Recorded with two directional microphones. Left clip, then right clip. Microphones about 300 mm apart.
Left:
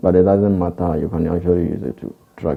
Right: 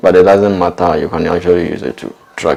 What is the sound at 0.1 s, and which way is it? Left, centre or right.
Speech, centre.